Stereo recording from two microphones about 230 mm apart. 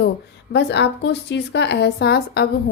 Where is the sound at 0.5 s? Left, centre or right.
Left.